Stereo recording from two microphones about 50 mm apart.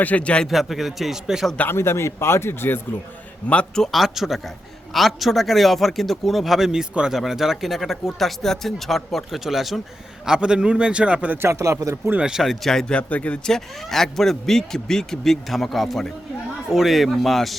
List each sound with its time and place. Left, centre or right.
0.0 s speech: left
0.4 s speech: centre
1.6 s speech: left
3.9 s speech: centre
10.2 s a man's voice: centre
11.3 s speech: right
12.4 s speech: centre
12.9 s speech: left
13.4 s speech: centre